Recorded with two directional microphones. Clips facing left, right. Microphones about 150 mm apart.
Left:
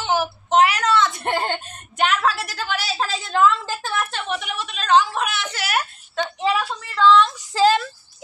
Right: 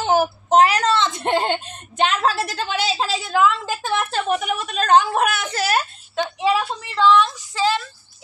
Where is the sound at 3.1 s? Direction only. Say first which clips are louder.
Left 2 dB; 5° right (ahead or behind).